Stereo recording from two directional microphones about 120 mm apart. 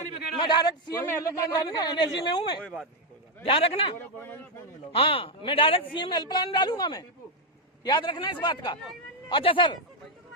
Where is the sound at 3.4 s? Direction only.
50° left (ahead or behind).